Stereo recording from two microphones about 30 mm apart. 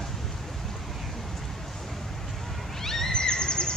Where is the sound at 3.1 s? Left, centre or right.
Left.